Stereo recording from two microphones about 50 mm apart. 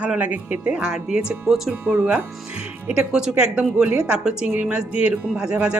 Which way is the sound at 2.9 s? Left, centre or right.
Centre.